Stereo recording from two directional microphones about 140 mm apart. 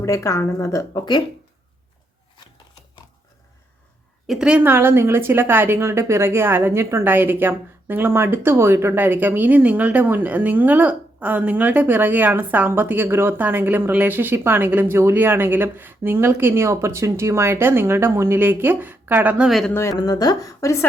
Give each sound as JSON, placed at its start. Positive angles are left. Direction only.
{"t": 0.0, "sound": "speech", "side_deg": 20}
{"t": 4.3, "sound": "a woman's voice", "side_deg": -5}
{"t": 19.5, "sound": "speech", "side_deg": 0}
{"t": 19.7, "sound": "speech", "side_deg": 20}